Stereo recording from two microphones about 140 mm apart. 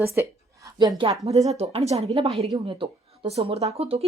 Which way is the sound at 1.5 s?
45° right (ahead or behind).